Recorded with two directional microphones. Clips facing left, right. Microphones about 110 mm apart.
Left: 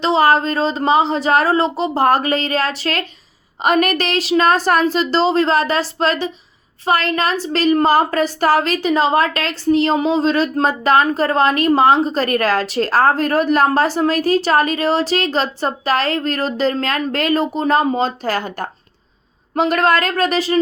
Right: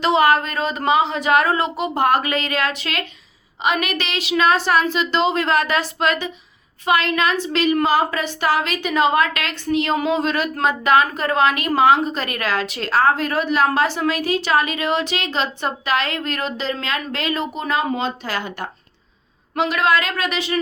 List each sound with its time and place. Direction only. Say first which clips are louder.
0.0 s a woman's voice: left 2 dB; 30° left (ahead or behind)